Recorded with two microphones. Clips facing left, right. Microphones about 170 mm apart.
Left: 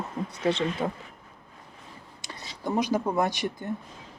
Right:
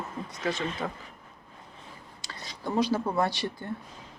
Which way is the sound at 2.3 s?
20° left (ahead or behind).